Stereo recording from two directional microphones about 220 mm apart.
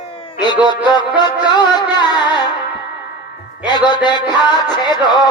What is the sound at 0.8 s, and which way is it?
Speech, 20° left (ahead or behind).